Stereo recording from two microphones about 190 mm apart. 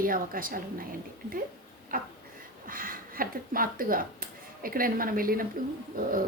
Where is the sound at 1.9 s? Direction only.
50° right (ahead or behind).